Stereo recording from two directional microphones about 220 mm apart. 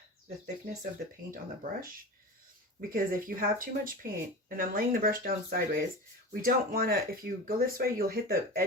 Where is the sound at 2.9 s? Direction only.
40° right (ahead or behind).